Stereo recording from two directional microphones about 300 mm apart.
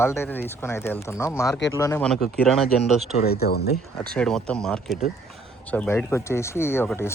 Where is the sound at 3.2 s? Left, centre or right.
Left.